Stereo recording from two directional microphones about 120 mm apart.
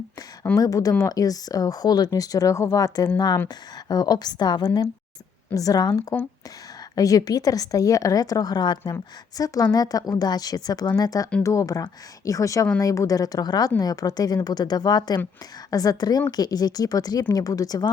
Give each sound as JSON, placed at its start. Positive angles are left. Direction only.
{"t": 0.5, "sound": "speech", "side_deg": 30}